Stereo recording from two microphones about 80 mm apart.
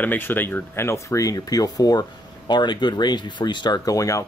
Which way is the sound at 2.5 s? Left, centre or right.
Left.